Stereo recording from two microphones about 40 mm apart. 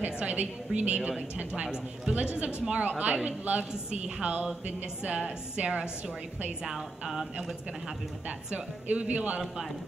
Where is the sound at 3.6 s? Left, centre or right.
Centre.